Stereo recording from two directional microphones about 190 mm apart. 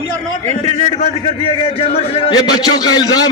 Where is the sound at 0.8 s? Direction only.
35° left (ahead or behind).